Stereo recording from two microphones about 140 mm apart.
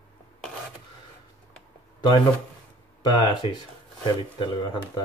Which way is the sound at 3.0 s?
30° left (ahead or behind).